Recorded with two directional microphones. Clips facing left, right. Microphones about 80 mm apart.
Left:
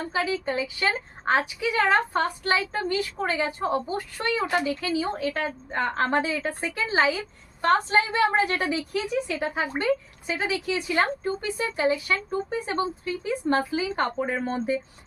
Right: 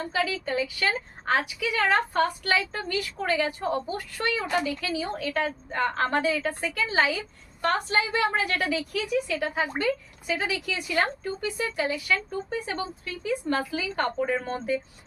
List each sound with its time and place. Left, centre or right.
0.1 s a woman's voice: left